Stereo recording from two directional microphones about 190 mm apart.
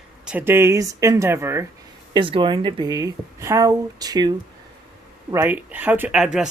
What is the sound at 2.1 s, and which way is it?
Speech, 25° right (ahead or behind).